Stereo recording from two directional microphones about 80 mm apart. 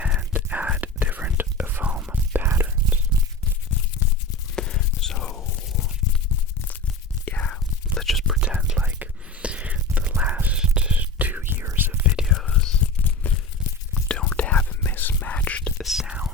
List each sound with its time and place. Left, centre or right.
0.0 s whispering: centre
4.0 s a sound: left
4.5 s whispering: centre
7.3 s whispering: centre
7.9 s whispering: centre
8.4 s whispering: centre
10.2 s a sound: centre
10.6 s whispering: centre
12.1 s whispering: centre
12.5 s whispering: centre
13.0 s tearing: left
13.9 s whispering: centre
15.8 s whispering: centre